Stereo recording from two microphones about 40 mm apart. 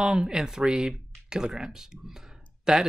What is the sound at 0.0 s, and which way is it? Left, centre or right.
Speech, right.